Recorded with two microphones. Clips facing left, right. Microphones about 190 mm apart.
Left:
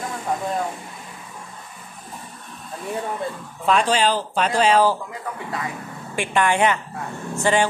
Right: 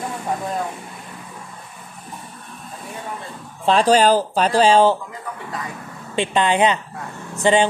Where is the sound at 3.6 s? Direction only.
35° right (ahead or behind).